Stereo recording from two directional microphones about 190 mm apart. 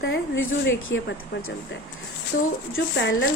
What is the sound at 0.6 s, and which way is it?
Speech, 75° left (ahead or behind).